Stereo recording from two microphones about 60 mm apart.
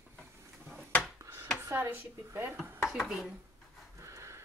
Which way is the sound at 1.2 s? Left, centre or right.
Right.